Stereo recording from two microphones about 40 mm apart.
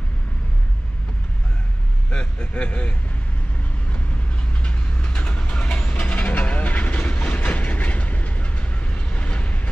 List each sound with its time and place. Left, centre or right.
2.0 s speech: left
4.6 s vehicle: left